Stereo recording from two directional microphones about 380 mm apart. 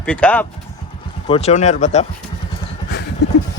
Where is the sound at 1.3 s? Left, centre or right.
Centre.